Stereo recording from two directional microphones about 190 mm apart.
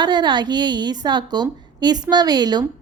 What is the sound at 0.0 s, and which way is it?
A woman's voice, 25° right (ahead or behind).